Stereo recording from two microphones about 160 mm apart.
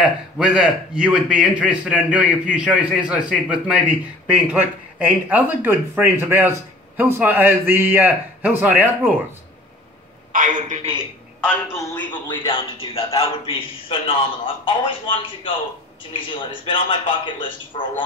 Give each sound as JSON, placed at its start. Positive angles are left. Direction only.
{"t": 0.0, "sound": "a man's voice", "side_deg": -5}
{"t": 10.3, "sound": "a man's voice", "side_deg": -55}
{"t": 11.9, "sound": "a man's voice", "side_deg": 10}
{"t": 12.3, "sound": "a man's voice", "side_deg": 35}